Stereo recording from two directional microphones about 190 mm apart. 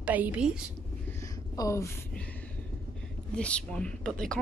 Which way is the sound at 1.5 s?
15° left (ahead or behind).